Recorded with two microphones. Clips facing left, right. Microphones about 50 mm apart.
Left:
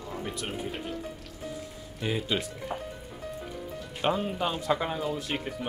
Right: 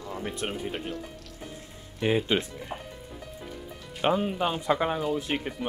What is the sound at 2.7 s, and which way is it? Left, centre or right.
Speech, centre.